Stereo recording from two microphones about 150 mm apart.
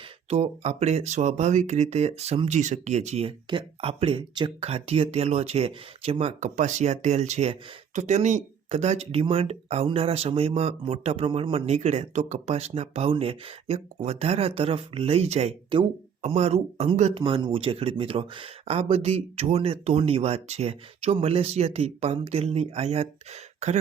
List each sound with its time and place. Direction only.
0.3 s speech: 40° right (ahead or behind)